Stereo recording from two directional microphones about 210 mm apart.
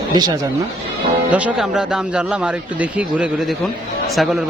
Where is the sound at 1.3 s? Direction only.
5° right (ahead or behind).